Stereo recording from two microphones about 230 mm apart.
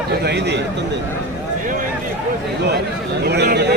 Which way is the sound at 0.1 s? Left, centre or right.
Right.